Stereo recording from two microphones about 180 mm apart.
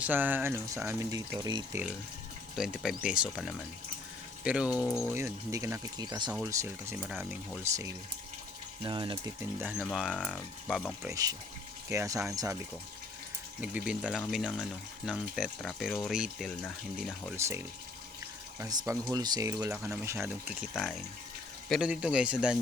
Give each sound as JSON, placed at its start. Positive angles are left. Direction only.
{"t": 0.0, "sound": "speech", "side_deg": -10}
{"t": 2.6, "sound": "speech", "side_deg": -5}
{"t": 5.1, "sound": "speech", "side_deg": -15}
{"t": 7.0, "sound": "speech", "side_deg": -5}
{"t": 7.6, "sound": "speech", "side_deg": -15}
{"t": 9.6, "sound": "speech", "side_deg": -5}
{"t": 11.1, "sound": "speech", "side_deg": -20}
{"t": 13.6, "sound": "speech", "side_deg": -5}
{"t": 17.3, "sound": "speech", "side_deg": -15}